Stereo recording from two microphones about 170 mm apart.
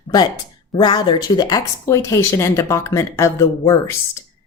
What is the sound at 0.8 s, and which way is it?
Speech, 25° left (ahead or behind).